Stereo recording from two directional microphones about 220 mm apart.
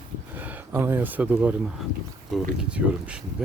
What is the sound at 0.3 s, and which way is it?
Speech, 10° right (ahead or behind).